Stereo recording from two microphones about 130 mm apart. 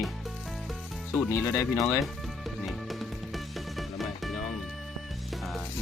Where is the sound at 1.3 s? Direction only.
25° left (ahead or behind).